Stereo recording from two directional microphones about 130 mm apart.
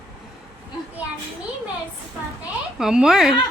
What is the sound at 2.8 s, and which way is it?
Speech, 5° right (ahead or behind).